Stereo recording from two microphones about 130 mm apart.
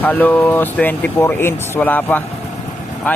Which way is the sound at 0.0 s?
15° left (ahead or behind).